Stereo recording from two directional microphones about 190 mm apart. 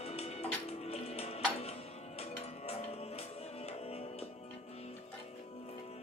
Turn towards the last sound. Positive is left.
turn(degrees=30)  # may be behind; listen again after turning